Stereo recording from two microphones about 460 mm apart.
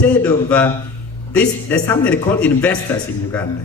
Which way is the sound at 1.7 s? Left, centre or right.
Centre.